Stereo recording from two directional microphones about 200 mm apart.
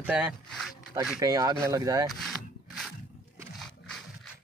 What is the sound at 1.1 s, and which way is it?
Speech, 15° right (ahead or behind).